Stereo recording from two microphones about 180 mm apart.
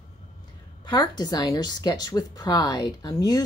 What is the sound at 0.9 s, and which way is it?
Speech, 20° left (ahead or behind).